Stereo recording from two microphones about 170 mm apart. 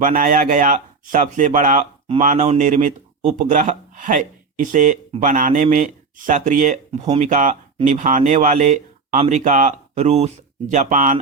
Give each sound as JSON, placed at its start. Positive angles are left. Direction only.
{"t": 0.0, "sound": "speech", "side_deg": -55}